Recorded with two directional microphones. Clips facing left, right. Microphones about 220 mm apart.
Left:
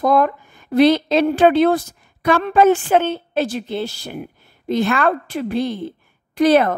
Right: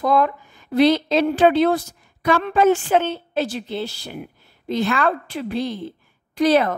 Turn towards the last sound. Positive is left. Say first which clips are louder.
# left 3 dB
turn(degrees=55)  # may be behind; listen again after turning